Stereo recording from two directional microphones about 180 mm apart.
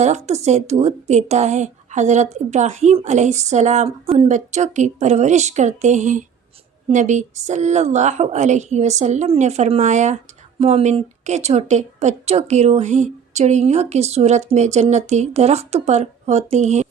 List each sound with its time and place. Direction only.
0.0 s a woman's voice: 40° right (ahead or behind)